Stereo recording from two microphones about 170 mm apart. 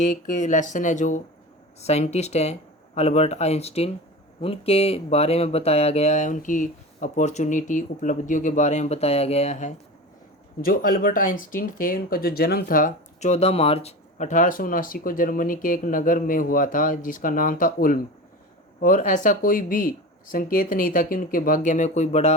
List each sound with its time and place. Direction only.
0.0 s speech: 45° left (ahead or behind)
10.6 s speech: 60° left (ahead or behind); by 22.4 s 40° left (ahead or behind)